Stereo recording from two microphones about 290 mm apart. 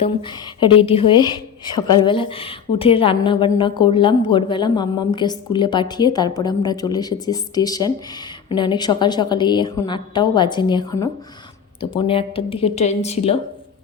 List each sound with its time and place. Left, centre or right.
0.0 s a woman's voice: centre